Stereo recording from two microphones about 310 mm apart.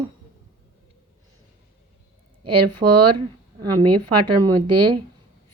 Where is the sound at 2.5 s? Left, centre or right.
Right.